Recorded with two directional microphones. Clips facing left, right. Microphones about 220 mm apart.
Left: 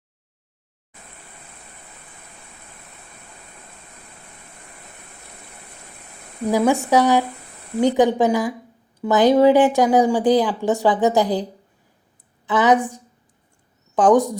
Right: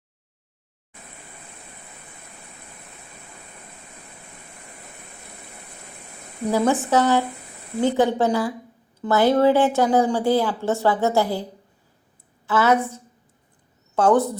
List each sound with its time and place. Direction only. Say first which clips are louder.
6.5 s speech: left 2 dB; 15° left (ahead or behind)
12.5 s a woman's voice: left 2 dB; 15° left (ahead or behind)